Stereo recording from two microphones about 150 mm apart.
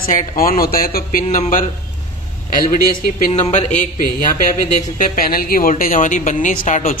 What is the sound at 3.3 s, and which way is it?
Speech, 50° left (ahead or behind).